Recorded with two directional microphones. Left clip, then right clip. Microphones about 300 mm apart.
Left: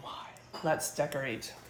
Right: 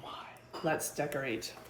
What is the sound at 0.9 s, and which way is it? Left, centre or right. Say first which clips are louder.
Speech: left 2 dB; left.